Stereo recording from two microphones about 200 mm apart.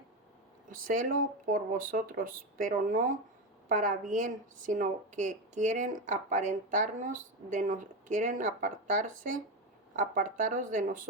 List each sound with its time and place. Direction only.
0.7 s a woman's voice: 45° right (ahead or behind)